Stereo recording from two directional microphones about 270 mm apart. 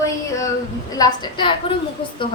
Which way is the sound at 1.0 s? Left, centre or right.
Centre.